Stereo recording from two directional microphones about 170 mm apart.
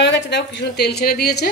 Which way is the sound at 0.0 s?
90° left.